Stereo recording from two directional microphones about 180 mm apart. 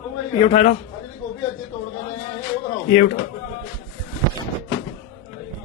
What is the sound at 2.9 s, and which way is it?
Speech, 50° left (ahead or behind).